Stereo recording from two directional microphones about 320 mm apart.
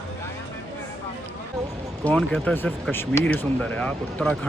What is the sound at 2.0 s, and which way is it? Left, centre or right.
Speech, centre.